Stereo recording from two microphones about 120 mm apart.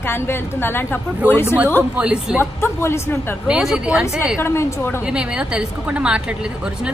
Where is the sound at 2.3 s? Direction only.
20° left (ahead or behind).